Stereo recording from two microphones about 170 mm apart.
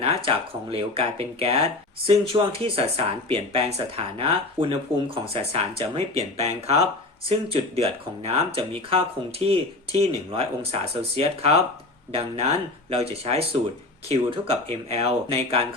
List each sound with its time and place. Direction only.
0.3 s speech: 35° right (ahead or behind)